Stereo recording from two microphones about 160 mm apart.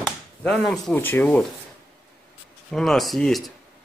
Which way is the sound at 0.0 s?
Centre (ahead or behind).